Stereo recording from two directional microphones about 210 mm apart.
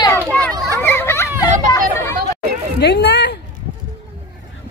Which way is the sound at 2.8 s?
55° left (ahead or behind).